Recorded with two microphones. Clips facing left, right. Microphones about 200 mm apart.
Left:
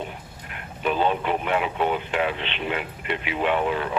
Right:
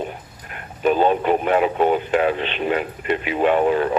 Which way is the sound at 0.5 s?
45° right (ahead or behind).